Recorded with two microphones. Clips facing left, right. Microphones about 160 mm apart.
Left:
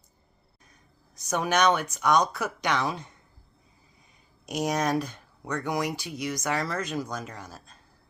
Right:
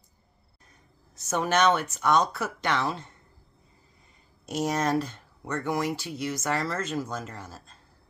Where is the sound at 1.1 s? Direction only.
15° left (ahead or behind).